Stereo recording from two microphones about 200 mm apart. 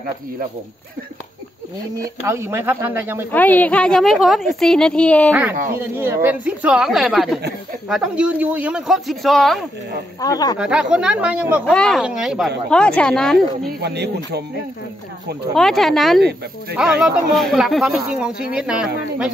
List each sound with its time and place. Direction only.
2.2 s speech: 10° right (ahead or behind)
3.3 s speech: 10° left (ahead or behind)
5.8 s speech: 10° right (ahead or behind)
10.2 s speech: 20° left (ahead or behind)
10.6 s speech: 5° right (ahead or behind)
13.7 s speech: 55° right (ahead or behind)
15.5 s speech: centre (ahead or behind)